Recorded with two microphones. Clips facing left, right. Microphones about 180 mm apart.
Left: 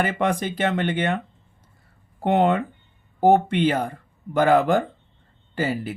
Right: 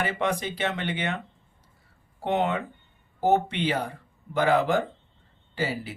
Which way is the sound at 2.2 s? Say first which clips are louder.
Left 6 dB; 50° left (ahead or behind).